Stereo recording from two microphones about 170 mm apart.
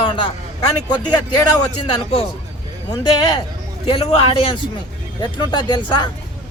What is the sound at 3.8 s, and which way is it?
Speech, 35° left (ahead or behind).